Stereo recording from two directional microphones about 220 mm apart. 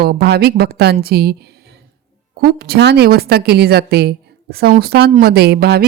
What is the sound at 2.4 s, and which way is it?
A woman's voice, 45° right (ahead or behind).